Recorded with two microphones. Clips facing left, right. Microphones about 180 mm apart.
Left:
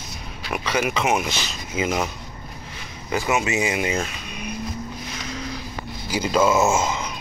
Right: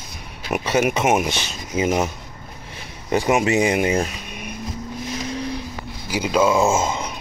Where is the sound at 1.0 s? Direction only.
45° right (ahead or behind).